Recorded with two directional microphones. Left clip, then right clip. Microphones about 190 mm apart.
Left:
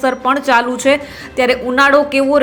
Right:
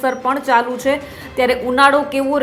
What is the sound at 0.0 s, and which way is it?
A woman's voice, 15° left (ahead or behind).